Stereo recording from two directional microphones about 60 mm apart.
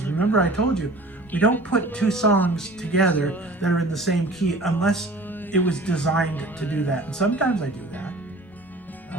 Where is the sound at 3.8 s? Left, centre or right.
Centre.